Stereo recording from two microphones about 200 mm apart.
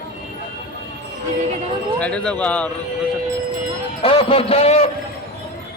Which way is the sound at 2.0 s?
5° left (ahead or behind).